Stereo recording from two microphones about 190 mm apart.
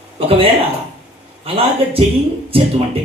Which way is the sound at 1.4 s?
30° right (ahead or behind).